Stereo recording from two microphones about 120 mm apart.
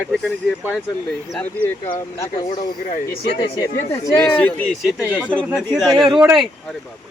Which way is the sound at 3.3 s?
50° left (ahead or behind).